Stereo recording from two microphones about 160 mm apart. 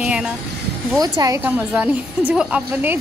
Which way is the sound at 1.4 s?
10° right (ahead or behind).